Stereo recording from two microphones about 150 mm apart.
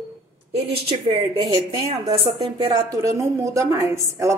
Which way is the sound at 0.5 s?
40° right (ahead or behind).